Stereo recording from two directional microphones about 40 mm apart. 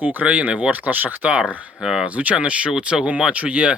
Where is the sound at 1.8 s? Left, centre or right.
Centre.